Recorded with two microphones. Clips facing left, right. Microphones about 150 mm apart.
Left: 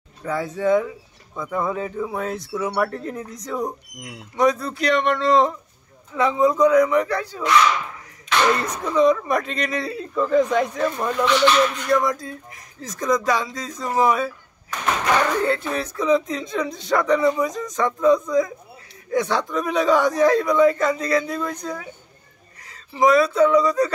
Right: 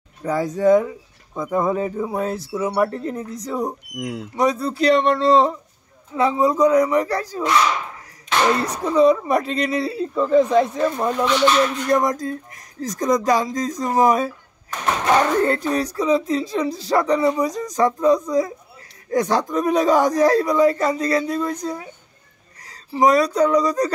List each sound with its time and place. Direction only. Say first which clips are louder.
0.2 s speech: right 4 dB; 40° right (ahead or behind)
0.8 s speech: right 2 dB; 25° right (ahead or behind)
11.9 s speech: right 2 dB; 40° right (ahead or behind)
14.7 s a sound: right 2 dB; 25° right (ahead or behind)
15.3 s speech: right 3 dB; 40° right (ahead or behind)